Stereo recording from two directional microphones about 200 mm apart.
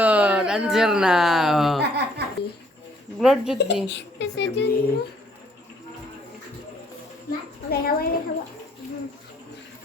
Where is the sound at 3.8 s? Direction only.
60° left (ahead or behind).